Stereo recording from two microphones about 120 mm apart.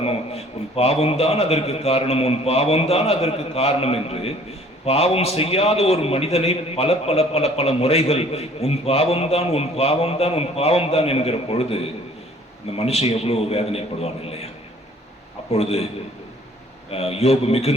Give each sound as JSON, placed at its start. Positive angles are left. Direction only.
{"t": 0.0, "sound": "a man's voice", "side_deg": 55}
{"t": 15.5, "sound": "a man's voice", "side_deg": 60}
{"t": 16.9, "sound": "a man's voice", "side_deg": 55}